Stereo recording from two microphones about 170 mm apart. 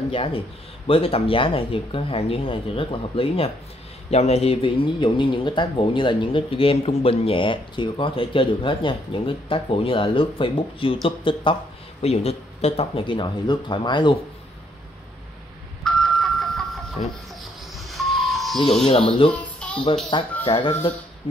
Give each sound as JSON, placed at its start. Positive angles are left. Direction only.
{"t": 0.1, "sound": "a man's voice", "side_deg": 35}
{"t": 15.8, "sound": "doorbell", "side_deg": 0}
{"t": 17.7, "sound": "music", "side_deg": 0}
{"t": 18.9, "sound": "speech", "side_deg": 35}
{"t": 19.3, "sound": "music", "side_deg": 5}
{"t": 20.1, "sound": "speech", "side_deg": 30}